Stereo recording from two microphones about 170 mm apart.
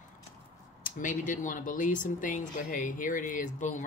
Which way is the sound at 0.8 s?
50° left (ahead or behind).